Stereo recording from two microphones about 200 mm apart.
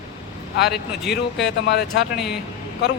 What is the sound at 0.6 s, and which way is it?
Speech, 55° left (ahead or behind).